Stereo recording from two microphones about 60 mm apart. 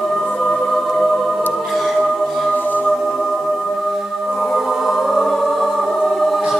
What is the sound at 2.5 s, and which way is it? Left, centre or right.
Music, left.